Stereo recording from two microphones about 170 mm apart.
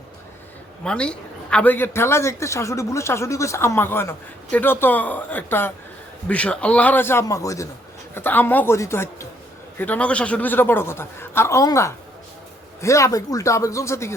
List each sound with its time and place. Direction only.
0.9 s a man's voice: 5° left (ahead or behind)